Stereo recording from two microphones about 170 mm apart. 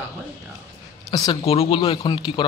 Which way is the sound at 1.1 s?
25° left (ahead or behind).